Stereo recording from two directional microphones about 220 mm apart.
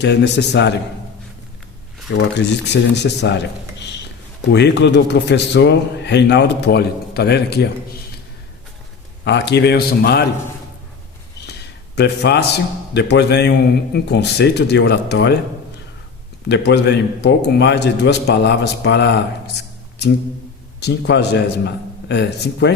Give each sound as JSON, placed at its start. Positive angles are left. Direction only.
{"t": 0.0, "sound": "a man's voice", "side_deg": 50}
{"t": 2.1, "sound": "a man's voice", "side_deg": 50}
{"t": 9.2, "sound": "a man's voice", "side_deg": 50}
{"t": 11.9, "sound": "a man's voice", "side_deg": 50}
{"t": 16.5, "sound": "a man's voice", "side_deg": 50}
{"t": 20.8, "sound": "a man's voice", "side_deg": 50}